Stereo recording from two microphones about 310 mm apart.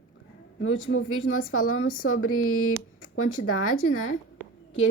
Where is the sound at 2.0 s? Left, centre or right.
Left.